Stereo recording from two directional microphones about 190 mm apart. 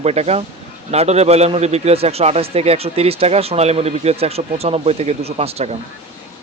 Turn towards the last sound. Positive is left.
turn(degrees=-30)  # may be behind; listen again after turning